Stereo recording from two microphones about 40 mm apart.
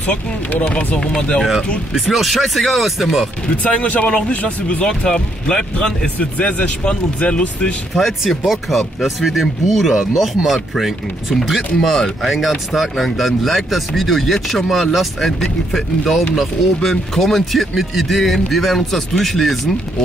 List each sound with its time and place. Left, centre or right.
0.5 s speech: left
2.0 s speech: centre
3.6 s speech: left
4.8 s speech: centre
8.3 s speech: centre